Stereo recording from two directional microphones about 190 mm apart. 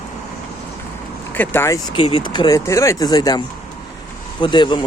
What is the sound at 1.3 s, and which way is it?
Speech, 10° left (ahead or behind).